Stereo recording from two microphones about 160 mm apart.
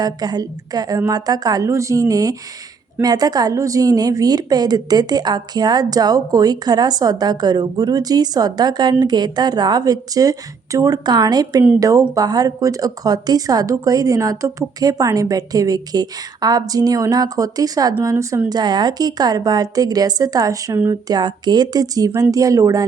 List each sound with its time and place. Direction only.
0.0 s a woman's voice: 25° right (ahead or behind)